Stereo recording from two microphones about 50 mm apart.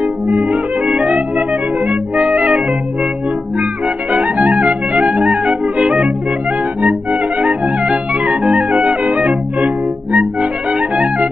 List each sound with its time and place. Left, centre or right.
0.0 s music: right
4.1 s music: right